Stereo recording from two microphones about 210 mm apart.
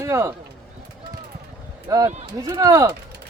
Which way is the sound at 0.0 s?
15° right (ahead or behind).